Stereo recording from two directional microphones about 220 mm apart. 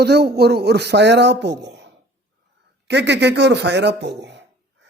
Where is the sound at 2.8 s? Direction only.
50° right (ahead or behind).